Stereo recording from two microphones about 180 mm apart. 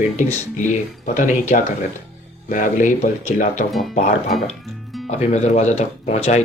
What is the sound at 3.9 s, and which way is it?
Speech, 40° left (ahead or behind).